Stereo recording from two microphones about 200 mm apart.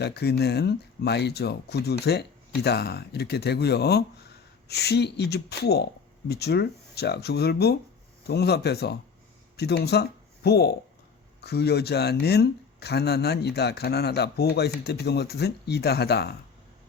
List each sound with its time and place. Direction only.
0.0 s speech: 55° left (ahead or behind)